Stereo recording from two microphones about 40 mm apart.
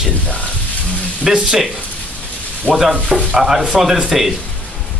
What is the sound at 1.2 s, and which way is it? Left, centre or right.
Speech, centre.